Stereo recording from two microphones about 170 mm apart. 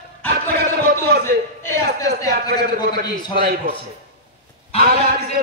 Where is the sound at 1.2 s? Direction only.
15° left (ahead or behind).